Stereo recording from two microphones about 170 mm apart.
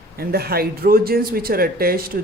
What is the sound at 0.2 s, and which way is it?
Speech, 65° right (ahead or behind).